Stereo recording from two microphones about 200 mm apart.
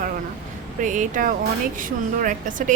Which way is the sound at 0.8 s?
40° right (ahead or behind).